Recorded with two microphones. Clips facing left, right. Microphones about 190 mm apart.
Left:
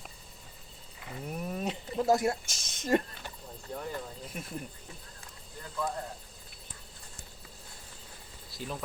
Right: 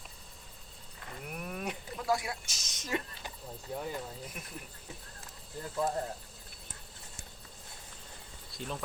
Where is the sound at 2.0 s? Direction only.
45° left (ahead or behind).